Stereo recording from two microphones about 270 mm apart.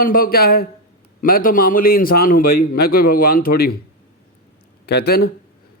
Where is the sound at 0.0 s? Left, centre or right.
Left.